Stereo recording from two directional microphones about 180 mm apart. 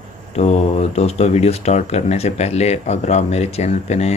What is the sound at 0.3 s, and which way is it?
Speech, 35° left (ahead or behind).